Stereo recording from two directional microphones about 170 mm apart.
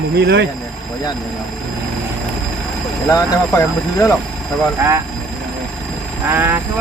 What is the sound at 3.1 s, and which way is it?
Speech, 20° left (ahead or behind).